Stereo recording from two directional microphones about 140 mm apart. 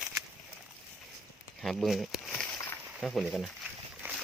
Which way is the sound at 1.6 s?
Centre (ahead or behind).